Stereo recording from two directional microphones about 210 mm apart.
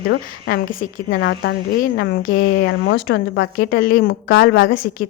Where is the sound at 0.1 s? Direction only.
45° left (ahead or behind).